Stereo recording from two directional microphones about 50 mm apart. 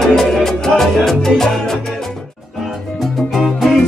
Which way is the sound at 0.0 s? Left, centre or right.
Centre.